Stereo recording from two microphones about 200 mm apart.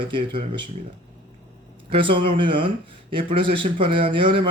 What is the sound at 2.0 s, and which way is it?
Speech, 25° right (ahead or behind).